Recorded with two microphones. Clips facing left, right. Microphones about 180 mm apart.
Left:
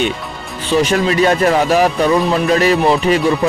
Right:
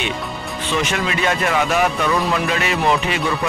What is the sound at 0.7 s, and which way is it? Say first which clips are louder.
Speech: left 9 dB; 35° left (ahead or behind).